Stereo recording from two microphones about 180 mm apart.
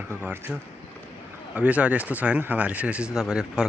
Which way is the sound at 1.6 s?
5° right (ahead or behind).